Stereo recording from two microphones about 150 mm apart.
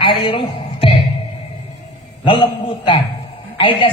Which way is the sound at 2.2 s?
35° left (ahead or behind).